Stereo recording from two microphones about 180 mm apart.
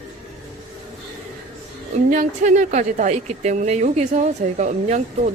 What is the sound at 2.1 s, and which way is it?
A woman's voice, 45° right (ahead or behind).